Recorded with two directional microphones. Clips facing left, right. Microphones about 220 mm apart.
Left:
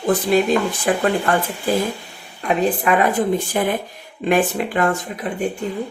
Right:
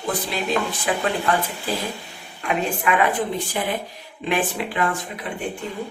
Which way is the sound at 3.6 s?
50° left (ahead or behind).